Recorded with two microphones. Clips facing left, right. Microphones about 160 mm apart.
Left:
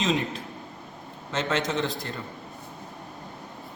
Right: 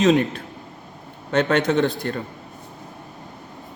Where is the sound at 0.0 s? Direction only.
70° right (ahead or behind).